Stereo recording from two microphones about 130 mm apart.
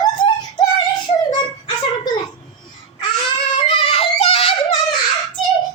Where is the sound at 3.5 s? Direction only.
40° left (ahead or behind).